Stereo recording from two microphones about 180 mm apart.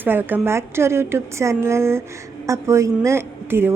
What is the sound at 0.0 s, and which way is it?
A woman's voice, 10° right (ahead or behind).